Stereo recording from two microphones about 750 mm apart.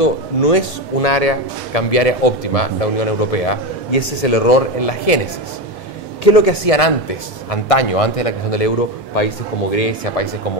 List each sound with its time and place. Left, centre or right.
0.0 s speech: left